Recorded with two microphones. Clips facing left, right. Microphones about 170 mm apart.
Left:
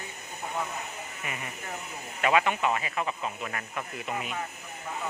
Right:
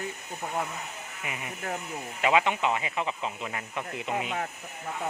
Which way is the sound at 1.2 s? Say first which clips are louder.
Right 4 dB; 15° right (ahead or behind).